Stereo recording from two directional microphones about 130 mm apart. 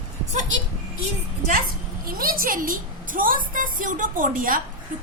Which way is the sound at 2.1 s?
90° right.